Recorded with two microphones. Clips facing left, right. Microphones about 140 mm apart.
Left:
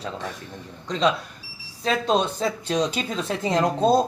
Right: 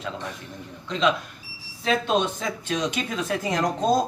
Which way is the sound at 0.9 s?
35° left (ahead or behind).